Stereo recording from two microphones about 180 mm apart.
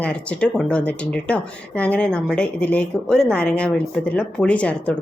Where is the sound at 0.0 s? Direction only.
5° left (ahead or behind).